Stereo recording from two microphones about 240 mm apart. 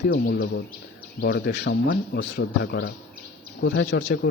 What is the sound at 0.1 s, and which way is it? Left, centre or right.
Speech, left.